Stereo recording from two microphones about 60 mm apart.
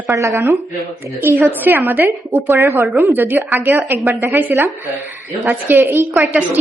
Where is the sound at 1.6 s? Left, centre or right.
Right.